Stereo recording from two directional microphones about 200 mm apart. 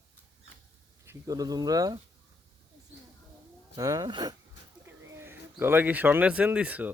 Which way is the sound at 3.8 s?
15° right (ahead or behind).